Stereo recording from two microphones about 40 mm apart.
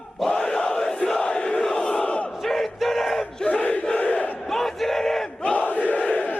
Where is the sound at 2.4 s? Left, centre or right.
Centre.